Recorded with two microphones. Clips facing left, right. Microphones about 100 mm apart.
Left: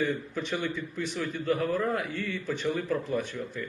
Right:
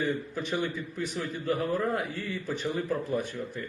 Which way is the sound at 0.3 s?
40° right (ahead or behind).